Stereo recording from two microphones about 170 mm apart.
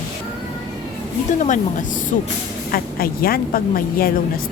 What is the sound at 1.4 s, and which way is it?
Speech, 45° left (ahead or behind).